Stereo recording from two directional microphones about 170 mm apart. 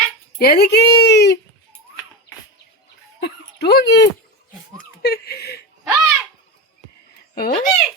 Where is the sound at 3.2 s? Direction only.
75° left (ahead or behind).